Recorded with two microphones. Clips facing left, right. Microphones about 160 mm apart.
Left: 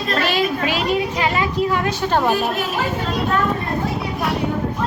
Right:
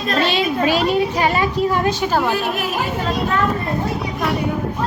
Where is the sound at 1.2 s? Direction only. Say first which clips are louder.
Right 2 dB; 40° right (ahead or behind).